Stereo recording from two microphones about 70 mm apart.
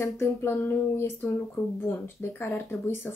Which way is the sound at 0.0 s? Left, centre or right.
Left.